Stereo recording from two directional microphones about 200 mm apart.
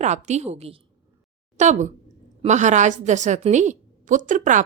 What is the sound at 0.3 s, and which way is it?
A woman's voice, 35° right (ahead or behind).